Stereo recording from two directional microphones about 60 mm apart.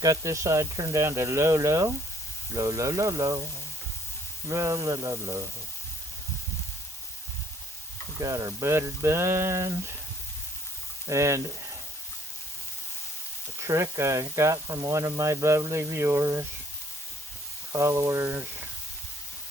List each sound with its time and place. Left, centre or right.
0.0 s speech: right
1.0 s speech: right
2.6 s speech: right
4.4 s speech: right
5.2 s speech: right
8.2 s speech: right
11.1 s speech: right
13.6 s speech: right
17.7 s speech: right